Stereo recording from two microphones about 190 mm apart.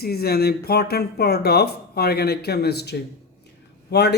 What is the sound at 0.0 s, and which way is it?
Speech, 55° left (ahead or behind).